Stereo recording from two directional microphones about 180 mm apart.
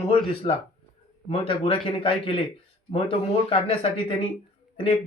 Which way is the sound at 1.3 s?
30° left (ahead or behind).